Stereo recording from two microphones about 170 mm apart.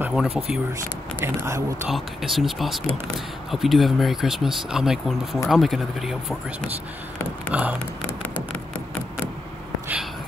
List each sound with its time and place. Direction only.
0.0 s a sound: centre (ahead or behind)
1.2 s speech: 15° right (ahead or behind)
1.9 s speech: centre (ahead or behind)
7.5 s speech: 10° right (ahead or behind)